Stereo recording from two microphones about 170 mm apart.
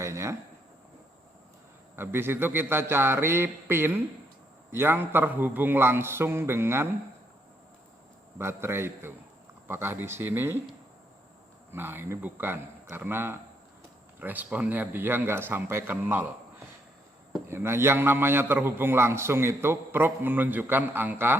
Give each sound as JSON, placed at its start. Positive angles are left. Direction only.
{"t": 0.0, "sound": "a sound", "side_deg": -15}
{"t": 2.0, "sound": "a man's voice", "side_deg": -15}
{"t": 8.4, "sound": "a man's voice", "side_deg": -15}
{"t": 11.7, "sound": "a man's voice", "side_deg": -10}
{"t": 17.5, "sound": "a man's voice", "side_deg": -15}